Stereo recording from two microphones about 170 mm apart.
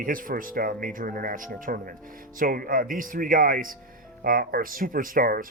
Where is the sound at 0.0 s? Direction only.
55° right (ahead or behind).